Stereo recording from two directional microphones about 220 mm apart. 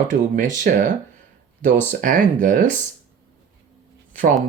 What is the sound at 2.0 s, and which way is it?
Speech, 40° right (ahead or behind).